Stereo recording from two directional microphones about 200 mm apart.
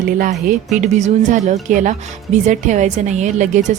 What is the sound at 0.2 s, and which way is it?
Speech, 40° right (ahead or behind).